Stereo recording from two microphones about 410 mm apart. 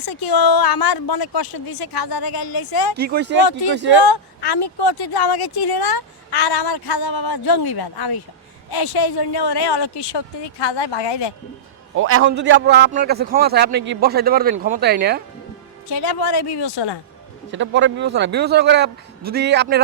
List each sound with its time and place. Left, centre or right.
0.0 s speech: left
2.9 s a man's voice: right
4.0 s a woman's voice: left
11.9 s a man's voice: right
15.9 s speech: left
17.5 s a man's voice: right